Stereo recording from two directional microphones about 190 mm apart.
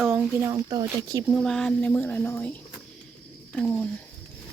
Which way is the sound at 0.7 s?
20° right (ahead or behind).